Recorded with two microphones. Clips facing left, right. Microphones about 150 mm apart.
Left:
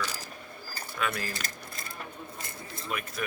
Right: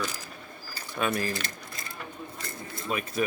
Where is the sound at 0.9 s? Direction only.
25° right (ahead or behind).